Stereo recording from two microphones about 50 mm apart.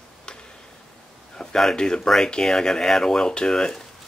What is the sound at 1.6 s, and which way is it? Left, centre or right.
Speech, centre.